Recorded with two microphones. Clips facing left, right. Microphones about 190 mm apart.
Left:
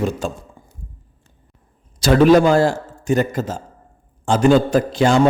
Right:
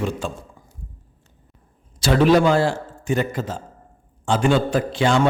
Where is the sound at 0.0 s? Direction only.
45° left (ahead or behind).